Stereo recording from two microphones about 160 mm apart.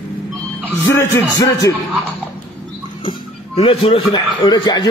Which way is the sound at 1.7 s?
10° right (ahead or behind).